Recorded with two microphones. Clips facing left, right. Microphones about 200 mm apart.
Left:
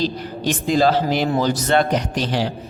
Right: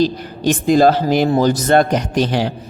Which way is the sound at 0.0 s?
50° right (ahead or behind).